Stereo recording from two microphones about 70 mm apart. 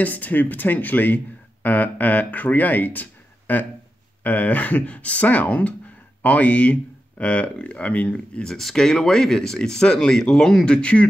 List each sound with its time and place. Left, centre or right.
0.0 s speech: left